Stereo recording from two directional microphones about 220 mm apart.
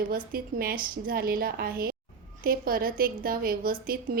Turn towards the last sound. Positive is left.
turn(degrees=-40)  # may be behind; listen again after turning